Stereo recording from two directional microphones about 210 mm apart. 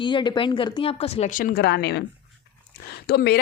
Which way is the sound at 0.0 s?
20° left (ahead or behind).